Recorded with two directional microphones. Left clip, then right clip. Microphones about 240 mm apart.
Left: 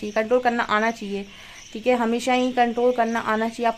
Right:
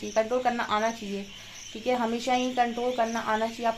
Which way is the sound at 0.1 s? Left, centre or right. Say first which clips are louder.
Left 5 dB; left.